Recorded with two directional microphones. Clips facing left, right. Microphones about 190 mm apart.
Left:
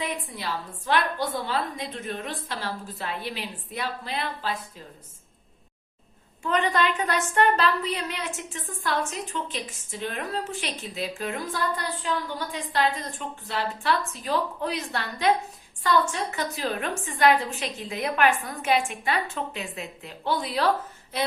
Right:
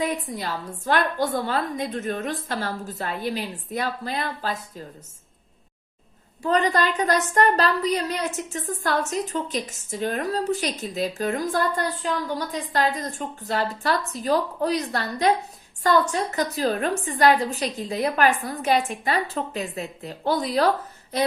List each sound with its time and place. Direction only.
0.0 s a woman's voice: 45° right (ahead or behind)
6.4 s a woman's voice: 40° right (ahead or behind)